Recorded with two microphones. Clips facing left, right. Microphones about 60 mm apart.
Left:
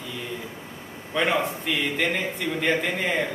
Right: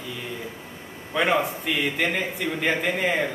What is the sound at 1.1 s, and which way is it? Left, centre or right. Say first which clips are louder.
A man's voice: right 1 dB; centre.